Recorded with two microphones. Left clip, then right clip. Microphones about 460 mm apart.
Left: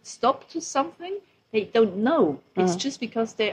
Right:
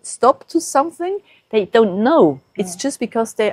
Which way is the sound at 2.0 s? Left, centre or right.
Right.